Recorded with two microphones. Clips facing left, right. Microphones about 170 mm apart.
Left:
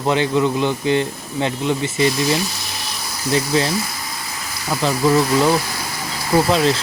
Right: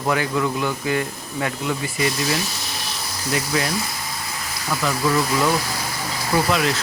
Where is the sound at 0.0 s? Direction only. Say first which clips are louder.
Left 4 dB; 20° left (ahead or behind).